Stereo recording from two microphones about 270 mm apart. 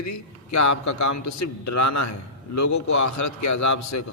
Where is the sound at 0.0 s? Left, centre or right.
Left.